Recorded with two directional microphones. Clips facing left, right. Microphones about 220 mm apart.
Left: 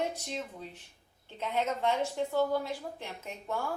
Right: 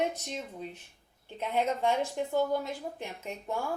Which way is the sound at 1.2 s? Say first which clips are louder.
Right 2 dB; 10° right (ahead or behind).